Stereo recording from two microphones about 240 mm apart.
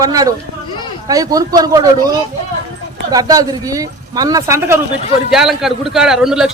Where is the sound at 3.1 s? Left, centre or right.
Centre.